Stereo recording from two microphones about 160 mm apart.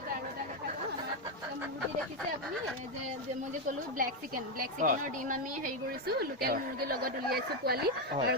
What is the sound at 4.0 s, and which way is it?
A woman's voice, 60° right (ahead or behind).